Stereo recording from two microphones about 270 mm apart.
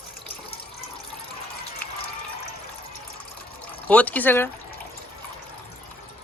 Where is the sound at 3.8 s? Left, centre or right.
Centre.